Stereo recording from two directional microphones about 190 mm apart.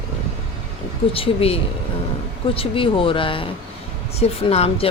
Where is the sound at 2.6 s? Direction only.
25° left (ahead or behind).